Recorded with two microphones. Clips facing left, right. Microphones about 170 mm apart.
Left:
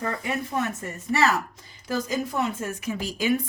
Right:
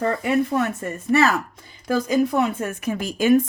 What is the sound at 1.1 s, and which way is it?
A woman's voice, 55° right (ahead or behind).